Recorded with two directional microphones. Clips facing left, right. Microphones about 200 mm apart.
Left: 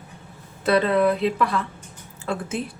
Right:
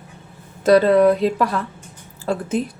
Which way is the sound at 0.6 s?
40° right (ahead or behind).